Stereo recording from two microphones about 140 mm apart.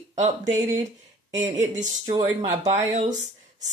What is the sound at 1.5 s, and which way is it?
Speech, 60° right (ahead or behind).